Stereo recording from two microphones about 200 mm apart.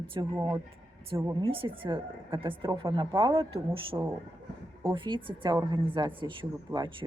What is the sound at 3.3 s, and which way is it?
Speech, 30° right (ahead or behind).